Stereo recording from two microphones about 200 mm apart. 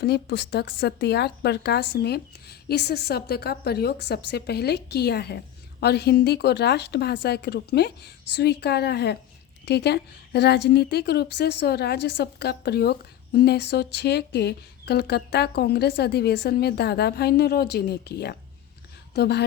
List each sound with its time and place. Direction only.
0.0 s a woman's voice: 55° left (ahead or behind)